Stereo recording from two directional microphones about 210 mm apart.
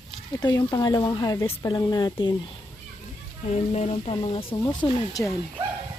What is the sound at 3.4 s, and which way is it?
Speech, 30° left (ahead or behind).